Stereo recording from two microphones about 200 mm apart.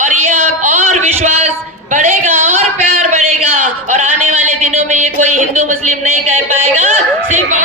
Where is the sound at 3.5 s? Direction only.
40° right (ahead or behind).